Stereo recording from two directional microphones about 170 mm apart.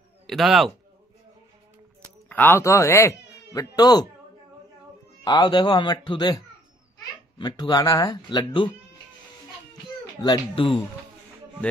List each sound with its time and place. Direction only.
0.3 s a man's voice: centre (ahead or behind)
2.2 s speech: 10° left (ahead or behind)
5.2 s speech: 25° left (ahead or behind)
10.2 s speech: 30° left (ahead or behind)